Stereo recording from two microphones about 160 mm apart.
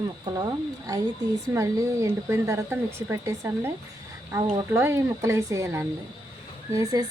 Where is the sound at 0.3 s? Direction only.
25° right (ahead or behind).